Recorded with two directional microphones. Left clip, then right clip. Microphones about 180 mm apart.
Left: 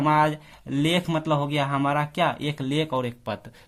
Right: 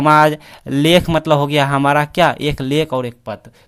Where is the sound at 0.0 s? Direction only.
35° right (ahead or behind); by 3.4 s 20° right (ahead or behind).